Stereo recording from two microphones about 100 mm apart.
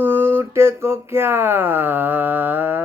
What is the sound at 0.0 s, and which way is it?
Mantra, 20° right (ahead or behind).